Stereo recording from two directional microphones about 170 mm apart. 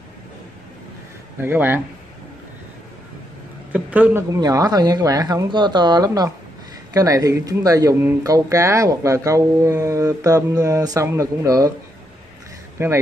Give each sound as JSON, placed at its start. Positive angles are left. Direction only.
{"t": 1.4, "sound": "speech", "side_deg": -15}
{"t": 3.7, "sound": "speech", "side_deg": -10}
{"t": 12.7, "sound": "speech", "side_deg": -15}